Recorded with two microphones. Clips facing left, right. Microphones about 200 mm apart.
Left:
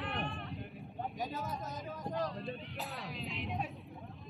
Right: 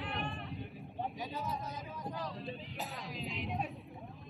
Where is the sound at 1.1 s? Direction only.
45° left (ahead or behind).